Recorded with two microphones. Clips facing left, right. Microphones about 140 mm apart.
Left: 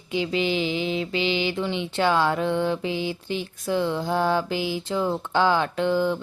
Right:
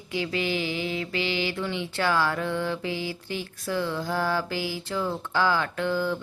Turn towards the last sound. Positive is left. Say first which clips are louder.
# left 4 dB
turn(degrees=20)  # may be behind; listen again after turning